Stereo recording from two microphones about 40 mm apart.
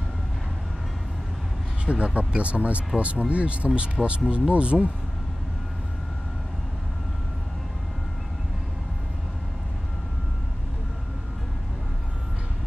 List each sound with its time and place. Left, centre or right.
1.9 s speech: right